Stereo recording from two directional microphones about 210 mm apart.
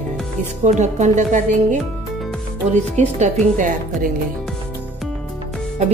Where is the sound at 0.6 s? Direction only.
35° right (ahead or behind).